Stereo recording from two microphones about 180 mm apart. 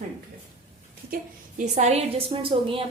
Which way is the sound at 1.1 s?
55° right (ahead or behind).